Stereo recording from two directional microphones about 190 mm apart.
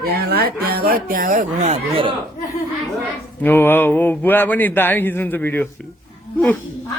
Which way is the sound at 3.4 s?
10° left (ahead or behind).